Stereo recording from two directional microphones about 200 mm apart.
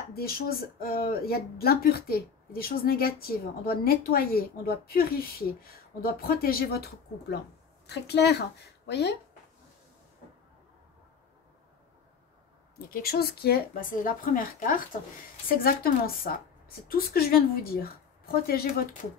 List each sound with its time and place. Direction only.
0.1 s a woman's voice: 50° left (ahead or behind)
12.9 s speech: 50° left (ahead or behind)